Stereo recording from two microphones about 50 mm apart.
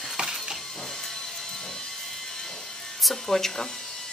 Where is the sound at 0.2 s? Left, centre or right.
Right.